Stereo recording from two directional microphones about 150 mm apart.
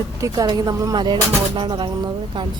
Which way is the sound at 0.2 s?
25° right (ahead or behind).